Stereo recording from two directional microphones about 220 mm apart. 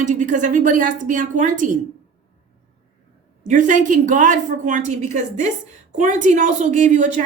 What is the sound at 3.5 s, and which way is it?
A woman's voice, 35° right (ahead or behind).